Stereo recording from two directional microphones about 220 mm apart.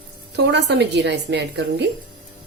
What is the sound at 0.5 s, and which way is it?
A woman's voice, 50° right (ahead or behind).